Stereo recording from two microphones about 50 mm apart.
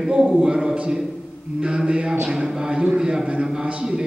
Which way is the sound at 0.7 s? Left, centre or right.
Right.